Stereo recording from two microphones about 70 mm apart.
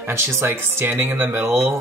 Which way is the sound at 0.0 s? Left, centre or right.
Right.